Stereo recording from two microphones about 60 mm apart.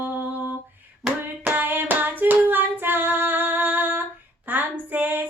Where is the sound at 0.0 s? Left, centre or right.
Right.